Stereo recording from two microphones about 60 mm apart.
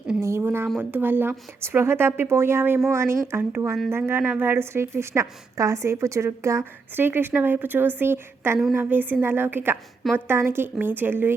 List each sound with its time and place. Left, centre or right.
0.2 s speech: right
0.4 s a woman's voice: right
6.9 s a woman's voice: right